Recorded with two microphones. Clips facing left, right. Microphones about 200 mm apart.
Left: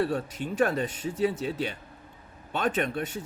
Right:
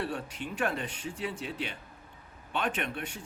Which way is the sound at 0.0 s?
40° left (ahead or behind).